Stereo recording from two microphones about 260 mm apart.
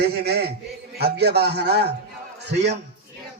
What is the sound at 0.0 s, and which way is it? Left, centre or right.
A man's voice, right.